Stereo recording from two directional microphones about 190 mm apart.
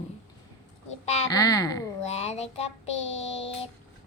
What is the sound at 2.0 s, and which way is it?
A child's voice, 35° left (ahead or behind).